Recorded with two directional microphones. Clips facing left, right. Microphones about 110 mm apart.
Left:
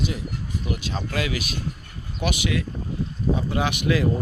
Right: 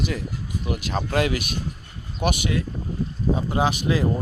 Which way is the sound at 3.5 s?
30° right (ahead or behind).